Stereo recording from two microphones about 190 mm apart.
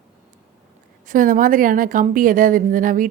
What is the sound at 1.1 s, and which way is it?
Speech, 45° right (ahead or behind).